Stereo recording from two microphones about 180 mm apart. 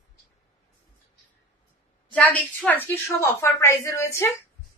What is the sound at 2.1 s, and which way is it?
A woman's voice, 5° left (ahead or behind).